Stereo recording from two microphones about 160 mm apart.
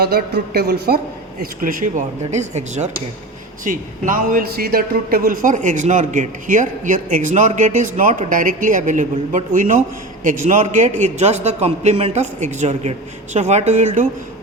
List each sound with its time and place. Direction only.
0.0 s speech: 75° right (ahead or behind)
1.4 s a man's voice: 55° right (ahead or behind)